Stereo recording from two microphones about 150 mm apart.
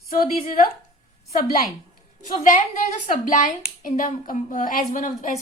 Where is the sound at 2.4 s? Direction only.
55° left (ahead or behind).